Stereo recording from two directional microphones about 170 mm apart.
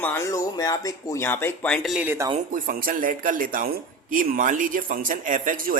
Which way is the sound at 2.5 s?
55° right (ahead or behind).